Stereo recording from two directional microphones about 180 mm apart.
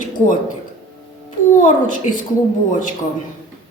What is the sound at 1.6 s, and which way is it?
Speech, 50° left (ahead or behind).